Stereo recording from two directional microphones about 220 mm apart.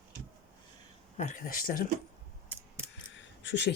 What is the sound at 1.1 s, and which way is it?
Speech, 35° left (ahead or behind).